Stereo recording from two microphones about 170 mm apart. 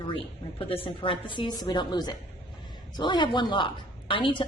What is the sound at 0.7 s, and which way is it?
A woman's voice, 30° left (ahead or behind).